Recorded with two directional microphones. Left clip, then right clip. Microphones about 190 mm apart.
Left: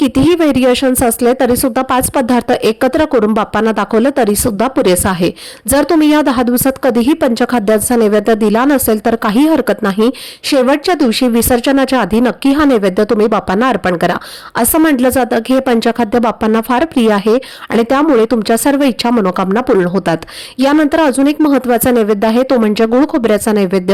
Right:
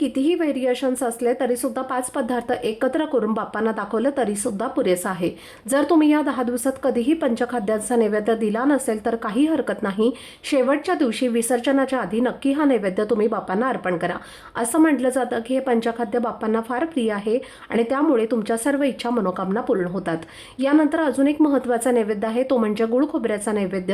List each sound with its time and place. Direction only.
0.0 s a woman's voice: 40° left (ahead or behind)